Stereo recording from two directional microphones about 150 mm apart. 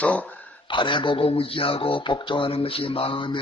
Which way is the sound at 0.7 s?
35° left (ahead or behind).